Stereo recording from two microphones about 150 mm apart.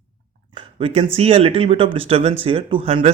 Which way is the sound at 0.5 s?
40° right (ahead or behind).